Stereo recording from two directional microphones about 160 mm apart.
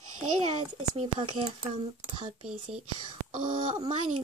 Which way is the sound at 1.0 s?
30° right (ahead or behind).